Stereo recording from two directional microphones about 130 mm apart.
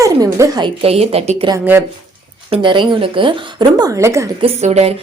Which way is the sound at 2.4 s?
40° right (ahead or behind).